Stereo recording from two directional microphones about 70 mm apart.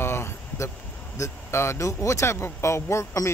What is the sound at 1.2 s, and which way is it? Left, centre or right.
Speech, left.